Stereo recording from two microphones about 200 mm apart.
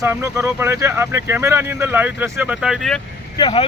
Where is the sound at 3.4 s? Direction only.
20° left (ahead or behind).